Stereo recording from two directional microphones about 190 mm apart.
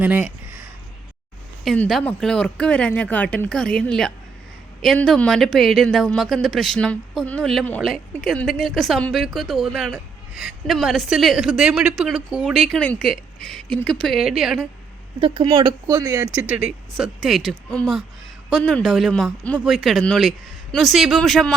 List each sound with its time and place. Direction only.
0.0 s speech: 10° right (ahead or behind)
1.6 s speech: 5° left (ahead or behind)
15.2 s speech: 25° right (ahead or behind)
17.0 s speech: centre (ahead or behind)